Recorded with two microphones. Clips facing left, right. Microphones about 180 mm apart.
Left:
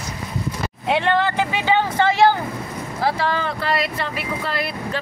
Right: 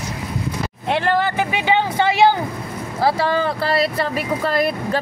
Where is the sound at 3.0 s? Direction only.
35° right (ahead or behind).